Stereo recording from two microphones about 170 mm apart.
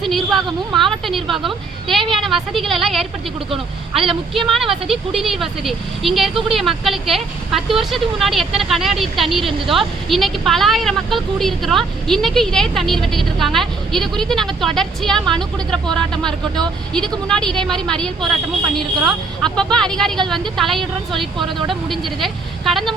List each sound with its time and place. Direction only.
0.0 s a woman's voice: centre (ahead or behind)
3.5 s speech: 35° right (ahead or behind)
4.4 s speech: centre (ahead or behind)